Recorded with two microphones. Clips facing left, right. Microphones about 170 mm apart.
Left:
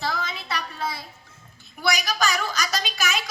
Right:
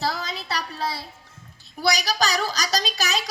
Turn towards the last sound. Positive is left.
turn(degrees=-35)  # may be behind; listen again after turning